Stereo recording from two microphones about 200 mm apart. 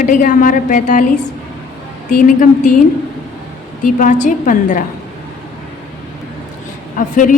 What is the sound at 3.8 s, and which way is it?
A woman's voice, 40° left (ahead or behind).